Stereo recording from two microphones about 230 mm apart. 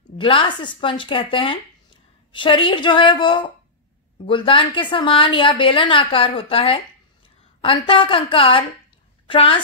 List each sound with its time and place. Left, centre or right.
0.2 s a woman's voice: left